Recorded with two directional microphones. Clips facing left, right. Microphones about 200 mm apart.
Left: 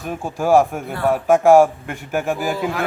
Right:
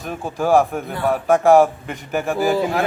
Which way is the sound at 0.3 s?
10° left (ahead or behind).